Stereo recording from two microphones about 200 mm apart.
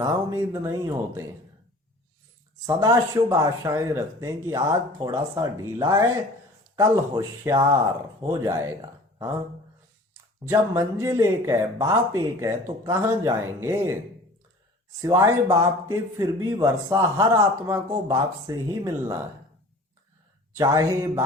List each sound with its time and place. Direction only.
0.0 s speech: 15° right (ahead or behind)
2.6 s speech: 15° right (ahead or behind)
10.5 s speech: 15° right (ahead or behind)
15.0 s speech: 15° right (ahead or behind)
20.6 s speech: 15° right (ahead or behind)